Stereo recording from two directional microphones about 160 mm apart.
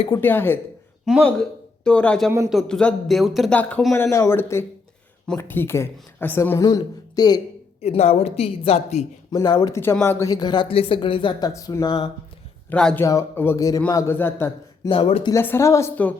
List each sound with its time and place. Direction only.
0.2 s speech: 15° left (ahead or behind)
1.0 s a man's voice: centre (ahead or behind); by 7.4 s 25° left (ahead or behind)
7.8 s a woman's voice: 40° left (ahead or behind)
9.3 s speech: 25° left (ahead or behind)
9.7 s speech: 15° left (ahead or behind)
12.7 s speech: 5° left (ahead or behind)
14.8 s a woman's voice: 35° left (ahead or behind)
15.3 s speech: 15° left (ahead or behind)